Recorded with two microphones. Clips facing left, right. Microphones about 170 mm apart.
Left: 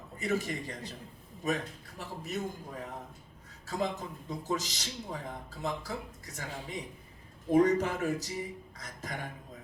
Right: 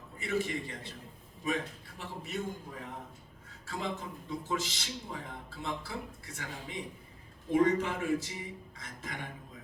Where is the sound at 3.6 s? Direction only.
40° left (ahead or behind).